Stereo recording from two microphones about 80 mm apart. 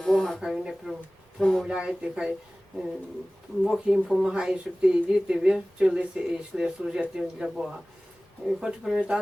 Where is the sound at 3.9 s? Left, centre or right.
Centre.